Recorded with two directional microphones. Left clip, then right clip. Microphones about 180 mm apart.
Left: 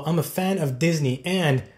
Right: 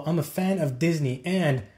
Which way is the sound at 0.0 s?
25° right (ahead or behind).